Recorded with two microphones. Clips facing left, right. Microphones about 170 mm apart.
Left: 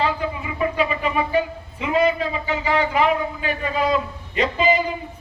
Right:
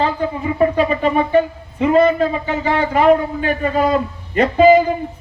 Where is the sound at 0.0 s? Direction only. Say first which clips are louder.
Right 5 dB; 40° right (ahead or behind).